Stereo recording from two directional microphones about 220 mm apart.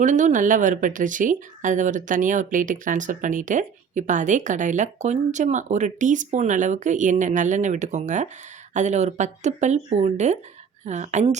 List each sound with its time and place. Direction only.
0.0 s speech: 35° right (ahead or behind)